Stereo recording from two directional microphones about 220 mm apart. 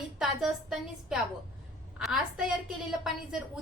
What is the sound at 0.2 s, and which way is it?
A woman's voice, centre (ahead or behind).